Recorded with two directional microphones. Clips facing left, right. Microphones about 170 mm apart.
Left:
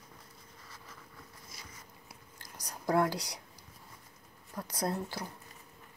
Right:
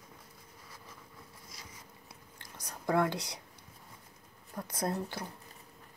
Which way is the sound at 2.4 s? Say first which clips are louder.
Even; 25° right (ahead or behind).